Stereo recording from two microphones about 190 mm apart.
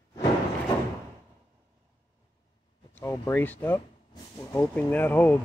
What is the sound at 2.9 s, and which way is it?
Speech, 10° left (ahead or behind).